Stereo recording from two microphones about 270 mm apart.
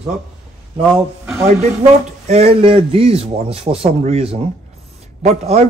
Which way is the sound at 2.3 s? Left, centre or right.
Right.